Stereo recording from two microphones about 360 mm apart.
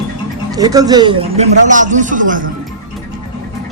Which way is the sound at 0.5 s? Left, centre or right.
Centre.